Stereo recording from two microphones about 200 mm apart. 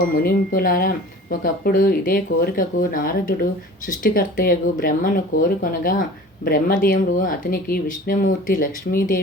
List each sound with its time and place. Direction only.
0.1 s speech: 45° left (ahead or behind)